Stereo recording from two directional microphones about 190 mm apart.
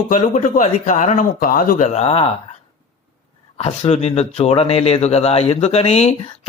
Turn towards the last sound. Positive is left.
turn(degrees=35)  # may be behind; listen again after turning